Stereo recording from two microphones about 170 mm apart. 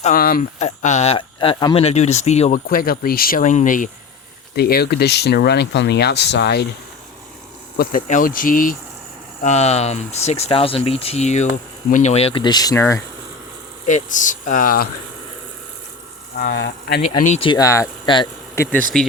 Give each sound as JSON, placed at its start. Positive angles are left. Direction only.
{"t": 0.0, "sound": "speech", "side_deg": 55}
{"t": 0.6, "sound": "speech", "side_deg": 45}
{"t": 1.8, "sound": "speech", "side_deg": 40}
{"t": 2.6, "sound": "speech", "side_deg": 60}
{"t": 4.5, "sound": "speech", "side_deg": 70}
{"t": 7.8, "sound": "speech", "side_deg": 50}
{"t": 9.4, "sound": "speech", "side_deg": 40}
{"t": 13.8, "sound": "speech", "side_deg": 45}
{"t": 16.4, "sound": "speech", "side_deg": 85}
{"t": 17.2, "sound": "speech", "side_deg": 40}
{"t": 17.5, "sound": "speech", "side_deg": 20}
{"t": 18.5, "sound": "speech", "side_deg": 15}